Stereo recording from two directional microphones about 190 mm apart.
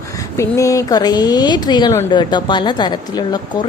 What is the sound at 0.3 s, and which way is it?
Speech, 15° left (ahead or behind).